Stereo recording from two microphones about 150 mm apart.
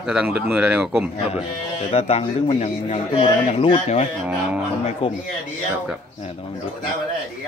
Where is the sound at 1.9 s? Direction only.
40° left (ahead or behind).